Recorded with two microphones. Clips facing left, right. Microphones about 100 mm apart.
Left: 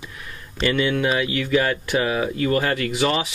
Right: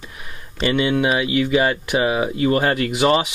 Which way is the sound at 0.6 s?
15° right (ahead or behind).